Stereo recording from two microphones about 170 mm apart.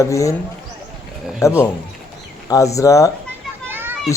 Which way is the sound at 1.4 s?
15° left (ahead or behind).